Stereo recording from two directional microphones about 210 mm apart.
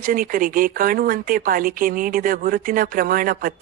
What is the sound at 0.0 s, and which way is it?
Speech, 40° right (ahead or behind).